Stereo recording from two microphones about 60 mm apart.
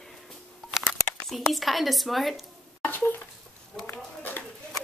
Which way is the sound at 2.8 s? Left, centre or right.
Left.